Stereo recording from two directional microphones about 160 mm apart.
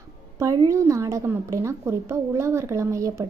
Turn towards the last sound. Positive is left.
turn(degrees=-20)  # may be behind; listen again after turning